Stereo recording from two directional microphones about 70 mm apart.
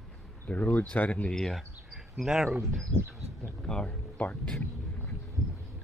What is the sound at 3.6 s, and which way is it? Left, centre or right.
Speech, centre.